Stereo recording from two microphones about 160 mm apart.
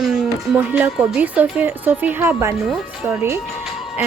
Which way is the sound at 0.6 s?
15° right (ahead or behind).